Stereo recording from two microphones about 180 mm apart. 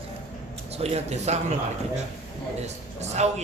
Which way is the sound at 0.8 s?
35° right (ahead or behind).